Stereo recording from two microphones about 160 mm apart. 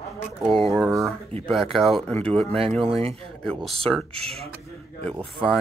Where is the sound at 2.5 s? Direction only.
35° right (ahead or behind).